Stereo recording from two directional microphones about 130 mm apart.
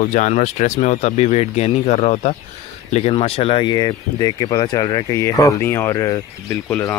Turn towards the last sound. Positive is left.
turn(degrees=15)  # may be behind; listen again after turning